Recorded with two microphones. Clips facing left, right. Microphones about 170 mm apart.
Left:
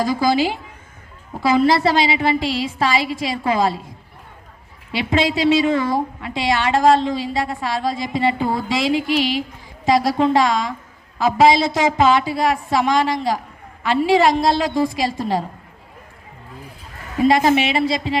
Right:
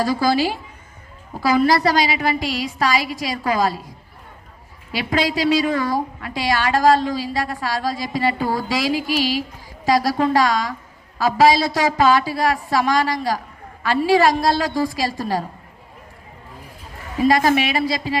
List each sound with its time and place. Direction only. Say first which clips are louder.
0.0 s a woman's voice: left 1 dB; 20° left (ahead or behind)
17.2 s a woman's voice: left 1 dB; 25° left (ahead or behind)